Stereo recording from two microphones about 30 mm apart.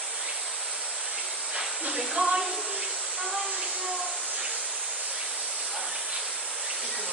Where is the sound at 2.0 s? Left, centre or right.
Centre.